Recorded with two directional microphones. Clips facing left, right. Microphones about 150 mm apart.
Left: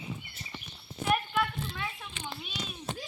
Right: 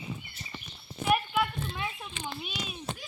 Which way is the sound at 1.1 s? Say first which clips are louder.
Right 2 dB; 15° right (ahead or behind).